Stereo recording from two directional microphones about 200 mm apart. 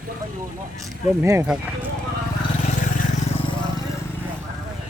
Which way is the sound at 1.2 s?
10° right (ahead or behind).